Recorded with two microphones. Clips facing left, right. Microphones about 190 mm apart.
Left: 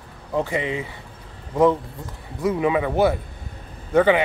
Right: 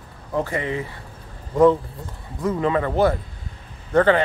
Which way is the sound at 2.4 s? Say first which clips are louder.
Left 1 dB; 10° left (ahead or behind).